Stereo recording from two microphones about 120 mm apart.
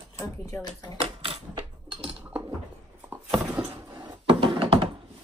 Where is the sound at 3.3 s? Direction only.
10° right (ahead or behind).